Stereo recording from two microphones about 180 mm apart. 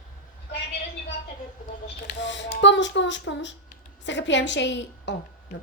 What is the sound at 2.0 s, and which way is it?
Speech, 80° left.